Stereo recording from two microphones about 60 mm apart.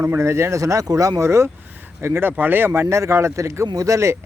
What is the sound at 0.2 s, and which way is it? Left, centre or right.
Speech, right.